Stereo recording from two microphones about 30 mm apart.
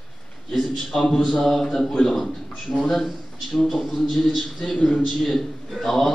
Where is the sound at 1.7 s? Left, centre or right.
Centre.